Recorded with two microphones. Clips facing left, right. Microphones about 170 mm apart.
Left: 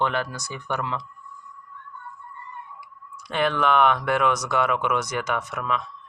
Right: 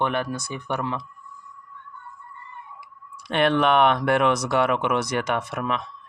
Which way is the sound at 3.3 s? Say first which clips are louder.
Right 3 dB; 65° right (ahead or behind).